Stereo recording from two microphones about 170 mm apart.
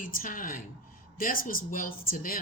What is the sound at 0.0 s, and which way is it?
A woman's voice, 55° left (ahead or behind).